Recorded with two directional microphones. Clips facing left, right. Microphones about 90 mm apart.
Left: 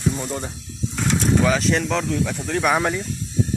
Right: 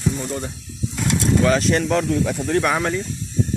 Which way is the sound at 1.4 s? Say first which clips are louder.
Right 2 dB; centre (ahead or behind).